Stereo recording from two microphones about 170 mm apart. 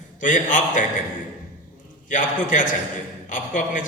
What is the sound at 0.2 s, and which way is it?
Speech, 50° left (ahead or behind).